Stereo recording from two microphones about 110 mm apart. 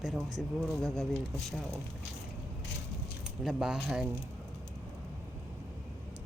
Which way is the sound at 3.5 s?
5° right (ahead or behind).